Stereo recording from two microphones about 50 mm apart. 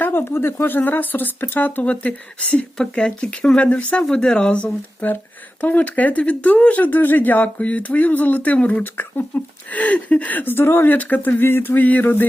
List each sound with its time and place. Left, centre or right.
0.0 s speech: left
2.7 s speech: centre
4.0 s speech: centre
8.8 s speech: left
9.7 s speech: left
10.6 s speech: left
10.8 s speech: left